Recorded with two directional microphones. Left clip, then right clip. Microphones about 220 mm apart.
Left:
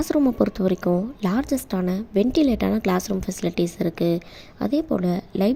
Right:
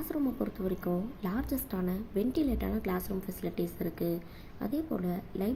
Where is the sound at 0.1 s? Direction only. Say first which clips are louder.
Left 13 dB; 40° left (ahead or behind).